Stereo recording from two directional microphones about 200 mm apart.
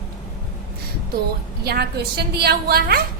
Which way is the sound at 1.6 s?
50° right (ahead or behind).